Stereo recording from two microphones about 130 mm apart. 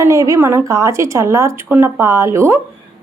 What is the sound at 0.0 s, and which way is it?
Speech, 25° right (ahead or behind).